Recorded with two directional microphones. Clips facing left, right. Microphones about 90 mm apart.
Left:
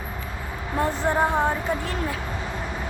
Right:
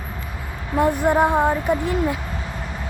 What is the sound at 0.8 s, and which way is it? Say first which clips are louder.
Speech: right 5 dB; 15° right (ahead or behind).